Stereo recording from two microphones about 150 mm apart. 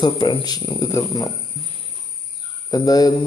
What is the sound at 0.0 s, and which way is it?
A man's voice, 35° left (ahead or behind).